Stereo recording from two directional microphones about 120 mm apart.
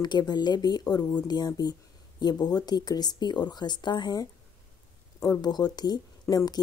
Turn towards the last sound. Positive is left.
turn(degrees=30)  # may be behind; listen again after turning